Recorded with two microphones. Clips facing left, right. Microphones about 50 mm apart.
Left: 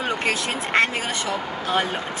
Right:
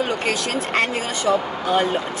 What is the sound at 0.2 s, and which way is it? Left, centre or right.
Speech, centre.